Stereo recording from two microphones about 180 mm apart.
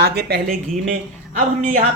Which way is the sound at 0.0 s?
65° right (ahead or behind).